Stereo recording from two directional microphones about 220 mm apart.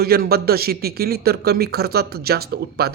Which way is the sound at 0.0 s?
45° right (ahead or behind).